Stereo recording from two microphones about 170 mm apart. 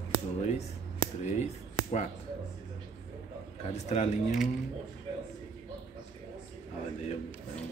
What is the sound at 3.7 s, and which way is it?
Speech, 40° left (ahead or behind).